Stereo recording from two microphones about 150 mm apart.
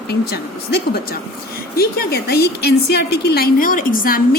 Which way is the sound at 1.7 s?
90° left.